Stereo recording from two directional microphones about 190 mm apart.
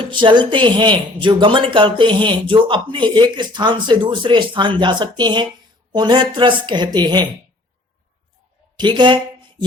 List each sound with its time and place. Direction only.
0.1 s speech: 25° right (ahead or behind)
8.7 s speech: 25° right (ahead or behind)